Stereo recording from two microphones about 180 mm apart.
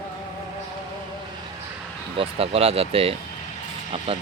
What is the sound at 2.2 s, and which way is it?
Speech, 30° right (ahead or behind).